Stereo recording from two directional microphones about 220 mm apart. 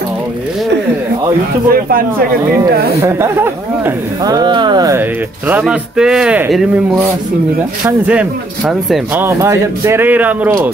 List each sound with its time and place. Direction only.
1.7 s speech: 40° right (ahead or behind)
3.0 s speech: 10° right (ahead or behind)
5.5 s speech: 5° right (ahead or behind)
8.1 s speech: 5° right (ahead or behind)